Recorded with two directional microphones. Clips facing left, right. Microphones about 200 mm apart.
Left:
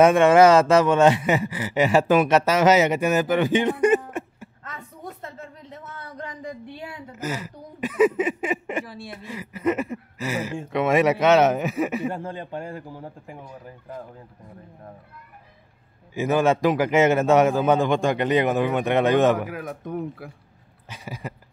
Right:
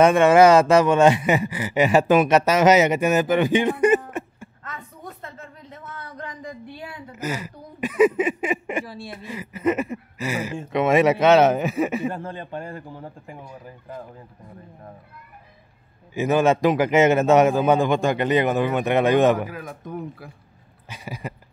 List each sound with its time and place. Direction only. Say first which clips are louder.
0.0 s speech: even; centre (ahead or behind)
4.6 s a sound: even; 30° left (ahead or behind)
7.2 s speech: right 1 dB; 15° right (ahead or behind)
8.8 s speech: right 2 dB; 30° right (ahead or behind)
12.1 s a man's voice: even; 15° left (ahead or behind)
13.4 s speech: even; 5° right (ahead or behind)
16.2 s speech: right 1 dB; 20° right (ahead or behind)
19.4 s speech: left 2 dB; 65° left (ahead or behind)
20.9 s speech: right 1 dB; 15° right (ahead or behind)